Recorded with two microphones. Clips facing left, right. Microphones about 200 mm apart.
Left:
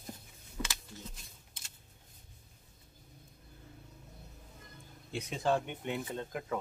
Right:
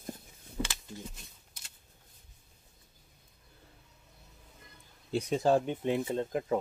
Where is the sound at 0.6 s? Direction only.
25° right (ahead or behind).